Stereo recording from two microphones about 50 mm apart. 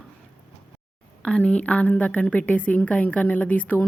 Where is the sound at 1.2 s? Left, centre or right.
Left.